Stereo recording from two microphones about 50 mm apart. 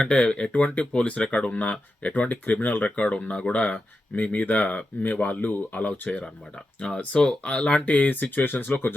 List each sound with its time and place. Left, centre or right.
0.0 s speech: centre
6.8 s speech: left